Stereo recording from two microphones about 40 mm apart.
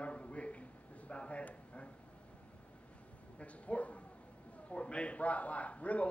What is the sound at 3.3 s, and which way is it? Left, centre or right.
A man's voice, left.